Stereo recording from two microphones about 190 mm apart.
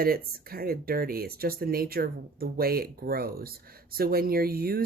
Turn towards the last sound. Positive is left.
turn(degrees=-50)  # may be behind; listen again after turning